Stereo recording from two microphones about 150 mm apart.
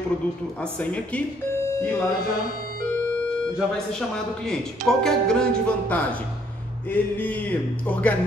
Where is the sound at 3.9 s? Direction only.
5° left (ahead or behind).